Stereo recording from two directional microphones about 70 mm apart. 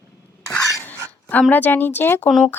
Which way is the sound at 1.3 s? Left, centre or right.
Left.